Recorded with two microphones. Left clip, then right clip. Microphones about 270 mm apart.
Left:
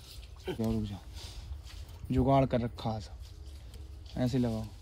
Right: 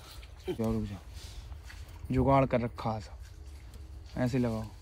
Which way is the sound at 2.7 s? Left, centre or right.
Centre.